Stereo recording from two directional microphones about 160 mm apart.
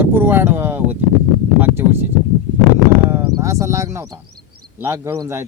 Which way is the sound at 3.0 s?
15° right (ahead or behind).